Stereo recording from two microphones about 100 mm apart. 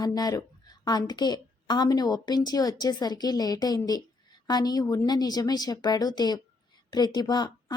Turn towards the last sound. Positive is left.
turn(degrees=45)  # may be behind; listen again after turning